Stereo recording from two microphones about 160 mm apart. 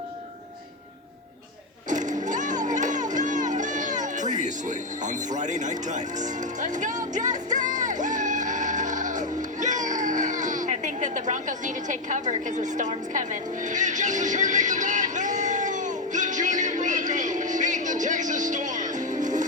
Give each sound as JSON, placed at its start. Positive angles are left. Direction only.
{"t": 1.9, "sound": "music", "side_deg": -50}